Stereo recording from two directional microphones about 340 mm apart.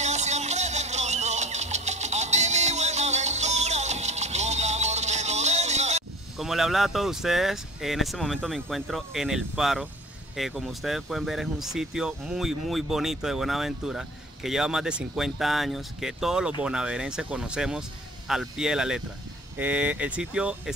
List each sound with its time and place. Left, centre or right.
0.0 s music: centre
6.3 s speech: centre